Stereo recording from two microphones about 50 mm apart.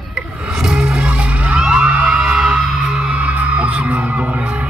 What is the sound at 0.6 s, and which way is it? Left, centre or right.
Music, centre.